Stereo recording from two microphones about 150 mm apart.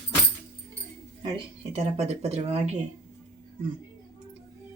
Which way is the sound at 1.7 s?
45° right (ahead or behind).